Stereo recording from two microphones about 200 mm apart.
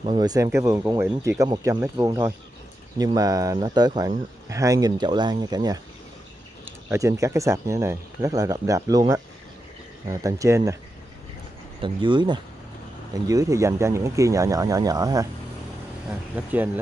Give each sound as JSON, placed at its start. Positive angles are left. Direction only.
{"t": 0.0, "sound": "speech", "side_deg": -20}
{"t": 11.8, "sound": "speech", "side_deg": -25}
{"t": 16.1, "sound": "speech", "side_deg": -10}